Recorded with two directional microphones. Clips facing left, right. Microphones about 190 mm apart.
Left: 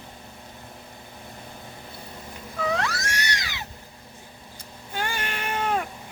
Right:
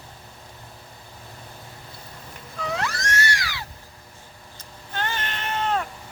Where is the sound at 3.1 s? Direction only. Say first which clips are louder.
Right 4 dB; 20° left (ahead or behind).